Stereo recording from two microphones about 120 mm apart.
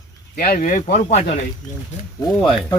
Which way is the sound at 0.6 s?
80° left.